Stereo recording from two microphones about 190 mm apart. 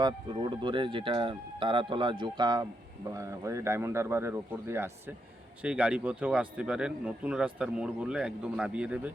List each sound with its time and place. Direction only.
0.0 s speech: 25° right (ahead or behind); by 9.1 s 5° right (ahead or behind)